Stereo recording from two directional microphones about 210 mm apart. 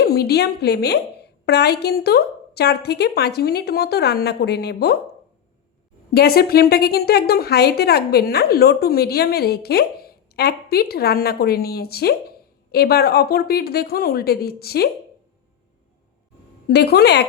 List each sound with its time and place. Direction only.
0.0 s a woman's voice: 50° left (ahead or behind)
6.1 s a woman's voice: 45° left (ahead or behind)
16.6 s a woman's voice: 50° left (ahead or behind)